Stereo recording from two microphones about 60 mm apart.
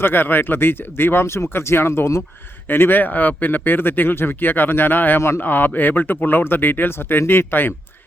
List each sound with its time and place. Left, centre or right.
0.0 s a man's voice: left
2.6 s a man's voice: left